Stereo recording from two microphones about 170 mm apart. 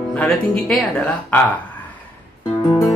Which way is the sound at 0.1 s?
5° left (ahead or behind).